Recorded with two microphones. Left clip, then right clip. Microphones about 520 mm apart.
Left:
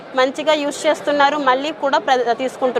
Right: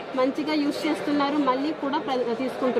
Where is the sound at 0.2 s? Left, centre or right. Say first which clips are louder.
Left 9 dB; left.